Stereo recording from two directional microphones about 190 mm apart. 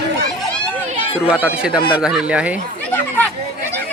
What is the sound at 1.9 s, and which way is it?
Speech, 5° right (ahead or behind).